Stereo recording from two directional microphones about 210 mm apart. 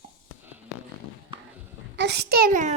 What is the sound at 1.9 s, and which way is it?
Speech, 55° right (ahead or behind).